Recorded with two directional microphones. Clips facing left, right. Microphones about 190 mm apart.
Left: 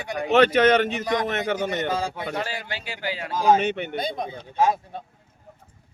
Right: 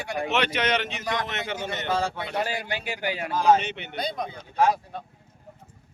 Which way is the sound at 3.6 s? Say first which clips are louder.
Left 9 dB; 50° left (ahead or behind).